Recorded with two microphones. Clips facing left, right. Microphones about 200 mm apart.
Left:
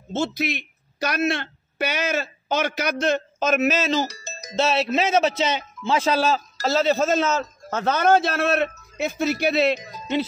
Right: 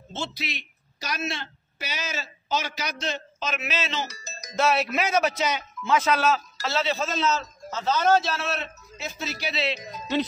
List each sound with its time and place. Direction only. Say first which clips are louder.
0.1 s a woman's voice: left 9 dB; 50° left (ahead or behind)